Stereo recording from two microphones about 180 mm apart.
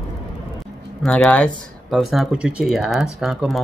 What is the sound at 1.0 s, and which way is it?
Speech, 5° left (ahead or behind).